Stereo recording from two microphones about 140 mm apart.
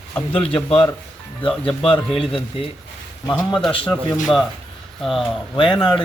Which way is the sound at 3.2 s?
25° left (ahead or behind).